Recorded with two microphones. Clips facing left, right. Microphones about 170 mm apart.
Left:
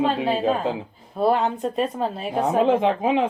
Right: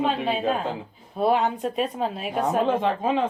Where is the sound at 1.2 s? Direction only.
5° right (ahead or behind).